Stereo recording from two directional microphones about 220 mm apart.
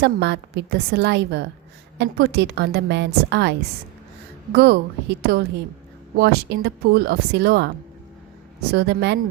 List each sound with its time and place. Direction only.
0.0 s a woman's voice: 50° right (ahead or behind)
8.7 s a woman's voice: 50° right (ahead or behind)